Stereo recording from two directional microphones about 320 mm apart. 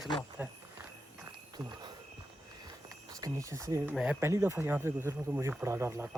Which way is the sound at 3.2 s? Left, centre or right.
Centre.